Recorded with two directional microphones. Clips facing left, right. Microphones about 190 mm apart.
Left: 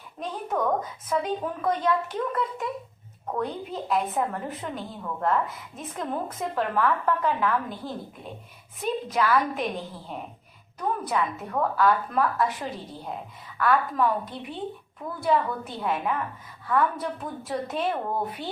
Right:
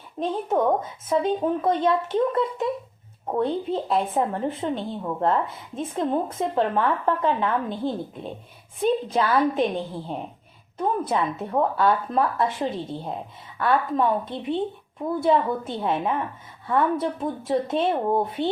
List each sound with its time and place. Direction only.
0.2 s a woman's voice: 25° right (ahead or behind)